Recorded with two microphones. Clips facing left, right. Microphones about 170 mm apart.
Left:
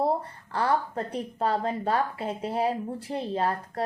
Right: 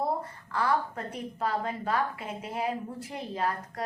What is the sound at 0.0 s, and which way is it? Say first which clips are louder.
A woman's voice: left 4 dB; 30° left (ahead or behind).